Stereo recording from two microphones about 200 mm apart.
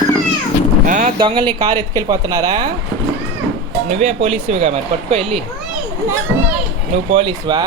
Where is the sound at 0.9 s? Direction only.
40° right (ahead or behind).